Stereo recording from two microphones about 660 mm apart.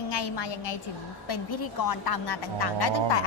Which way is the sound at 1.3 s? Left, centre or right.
Left.